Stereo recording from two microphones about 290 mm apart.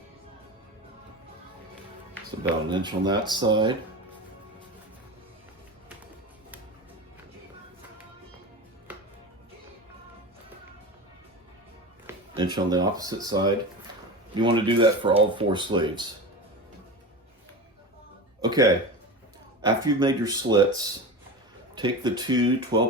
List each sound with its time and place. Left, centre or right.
2.6 s speech: centre
12.0 s speech: centre
18.4 s music: centre
19.6 s speech: centre
21.8 s speech: centre